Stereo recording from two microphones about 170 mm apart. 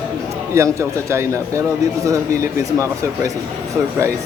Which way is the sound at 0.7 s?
15° right (ahead or behind).